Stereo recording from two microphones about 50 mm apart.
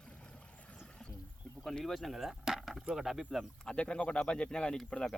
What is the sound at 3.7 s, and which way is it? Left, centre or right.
Speech, left.